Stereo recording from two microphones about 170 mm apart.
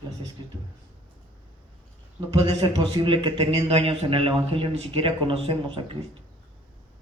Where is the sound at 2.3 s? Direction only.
25° right (ahead or behind).